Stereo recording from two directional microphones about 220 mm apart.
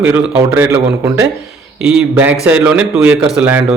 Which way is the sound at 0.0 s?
5° right (ahead or behind).